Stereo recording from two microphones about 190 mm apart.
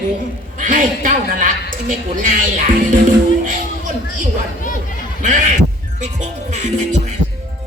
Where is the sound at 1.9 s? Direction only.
45° right (ahead or behind).